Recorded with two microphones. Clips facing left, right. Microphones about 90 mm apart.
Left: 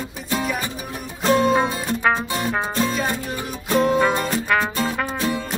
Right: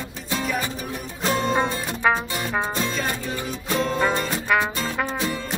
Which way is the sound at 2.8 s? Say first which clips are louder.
Left 3 dB; 10° left (ahead or behind).